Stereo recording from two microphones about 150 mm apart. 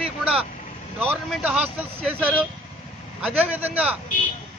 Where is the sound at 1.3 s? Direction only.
5° right (ahead or behind).